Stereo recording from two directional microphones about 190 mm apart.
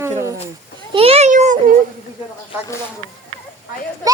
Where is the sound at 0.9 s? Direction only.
30° right (ahead or behind).